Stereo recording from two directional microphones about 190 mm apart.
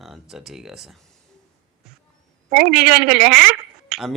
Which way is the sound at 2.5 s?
55° right (ahead or behind).